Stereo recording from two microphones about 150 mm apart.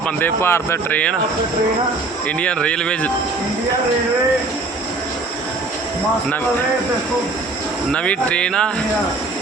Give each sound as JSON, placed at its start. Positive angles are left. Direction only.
{"t": 0.2, "sound": "speech", "side_deg": 15}
{"t": 2.4, "sound": "speech", "side_deg": 5}
{"t": 7.9, "sound": "speech", "side_deg": 10}